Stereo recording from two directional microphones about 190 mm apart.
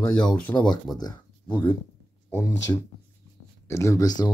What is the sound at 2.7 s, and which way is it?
Speech, 20° left (ahead or behind).